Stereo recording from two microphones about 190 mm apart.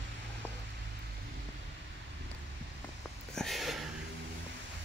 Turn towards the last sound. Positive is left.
turn(degrees=0)  # may be behind; listen again after turning